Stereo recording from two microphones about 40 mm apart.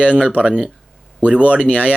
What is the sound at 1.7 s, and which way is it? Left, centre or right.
Speech, left.